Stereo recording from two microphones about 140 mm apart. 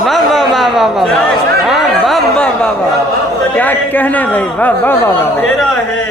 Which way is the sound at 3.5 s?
10° left (ahead or behind).